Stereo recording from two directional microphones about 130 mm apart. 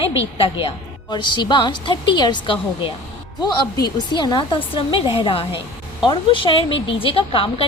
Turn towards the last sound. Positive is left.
turn(degrees=45)  # may be behind; listen again after turning